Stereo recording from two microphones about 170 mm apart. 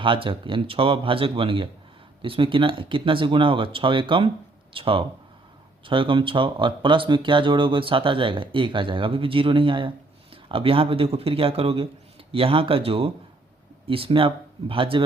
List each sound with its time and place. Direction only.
0.0 s speech: 30° right (ahead or behind)